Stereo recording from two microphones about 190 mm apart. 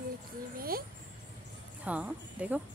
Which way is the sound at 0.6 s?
50° right (ahead or behind).